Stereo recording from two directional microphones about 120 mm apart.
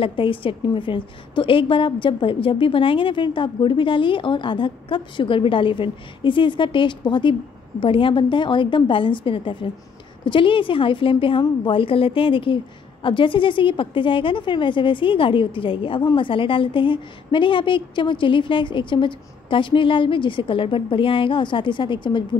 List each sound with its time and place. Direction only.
0.0 s a woman's voice: 45° left (ahead or behind)